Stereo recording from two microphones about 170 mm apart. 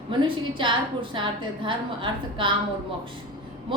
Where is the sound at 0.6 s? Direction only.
30° right (ahead or behind).